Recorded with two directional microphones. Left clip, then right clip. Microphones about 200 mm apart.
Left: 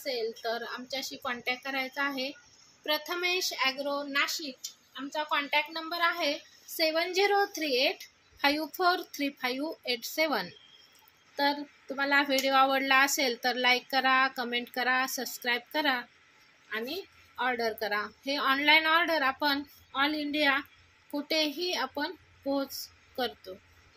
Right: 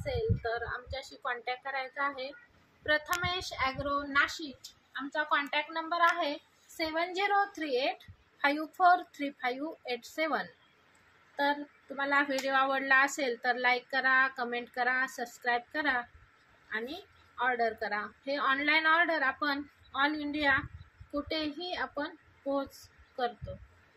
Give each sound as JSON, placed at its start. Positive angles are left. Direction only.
{"t": 0.0, "sound": "speech", "side_deg": 50}
{"t": 3.2, "sound": "a woman's voice", "side_deg": 40}
{"t": 6.8, "sound": "speech", "side_deg": 55}
{"t": 12.0, "sound": "speech", "side_deg": 45}
{"t": 17.4, "sound": "speech", "side_deg": 50}